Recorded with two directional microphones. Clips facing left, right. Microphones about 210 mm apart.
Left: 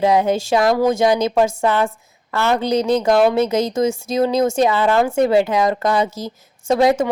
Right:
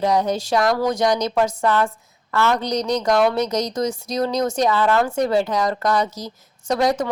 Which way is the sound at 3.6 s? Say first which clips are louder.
Left 5 dB; 25° left (ahead or behind).